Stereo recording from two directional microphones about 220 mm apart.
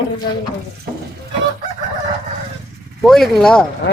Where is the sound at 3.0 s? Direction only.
Centre (ahead or behind).